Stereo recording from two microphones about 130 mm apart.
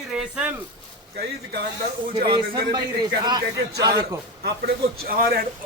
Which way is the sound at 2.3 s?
35° right (ahead or behind).